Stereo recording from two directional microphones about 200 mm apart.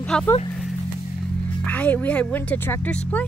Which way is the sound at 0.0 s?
5° left (ahead or behind).